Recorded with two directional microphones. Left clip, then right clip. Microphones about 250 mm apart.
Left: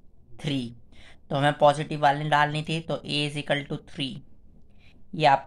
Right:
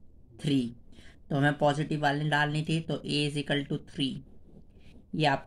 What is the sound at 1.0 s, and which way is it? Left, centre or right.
Speech, centre.